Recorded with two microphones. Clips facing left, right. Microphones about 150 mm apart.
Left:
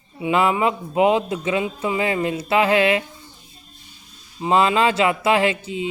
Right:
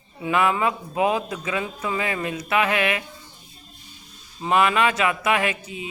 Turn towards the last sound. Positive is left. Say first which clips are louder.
# left 5 dB
turn(degrees=25)  # may be behind; listen again after turning